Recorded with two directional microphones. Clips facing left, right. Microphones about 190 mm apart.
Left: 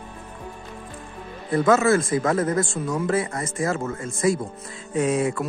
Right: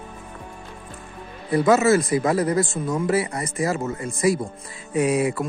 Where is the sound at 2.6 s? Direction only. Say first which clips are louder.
Right 1 dB; 20° right (ahead or behind).